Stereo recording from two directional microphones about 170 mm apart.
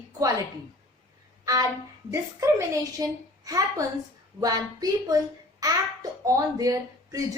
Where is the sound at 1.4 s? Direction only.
20° right (ahead or behind).